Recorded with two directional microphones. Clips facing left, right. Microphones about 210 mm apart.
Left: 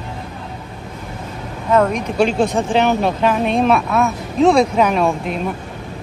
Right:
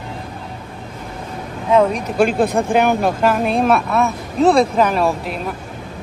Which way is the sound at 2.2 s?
55° right (ahead or behind).